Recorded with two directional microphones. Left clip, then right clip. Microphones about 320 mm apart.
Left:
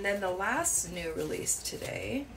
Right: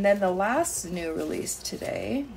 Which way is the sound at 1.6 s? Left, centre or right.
Centre.